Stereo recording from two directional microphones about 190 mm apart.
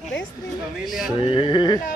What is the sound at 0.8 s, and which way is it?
Speech, centre (ahead or behind).